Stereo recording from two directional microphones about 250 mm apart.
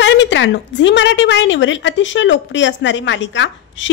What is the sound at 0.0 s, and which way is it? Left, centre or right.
A woman's voice, left.